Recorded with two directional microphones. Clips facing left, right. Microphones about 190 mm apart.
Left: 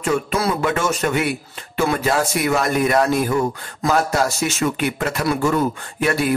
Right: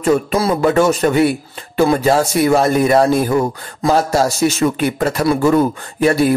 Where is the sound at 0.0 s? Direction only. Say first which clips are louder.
Right 5 dB; 35° right (ahead or behind).